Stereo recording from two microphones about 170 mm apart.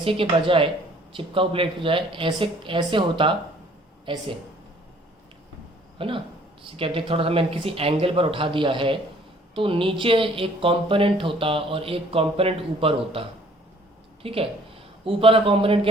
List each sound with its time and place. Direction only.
0.0 s speech: 30° right (ahead or behind)
6.0 s speech: 30° right (ahead or behind)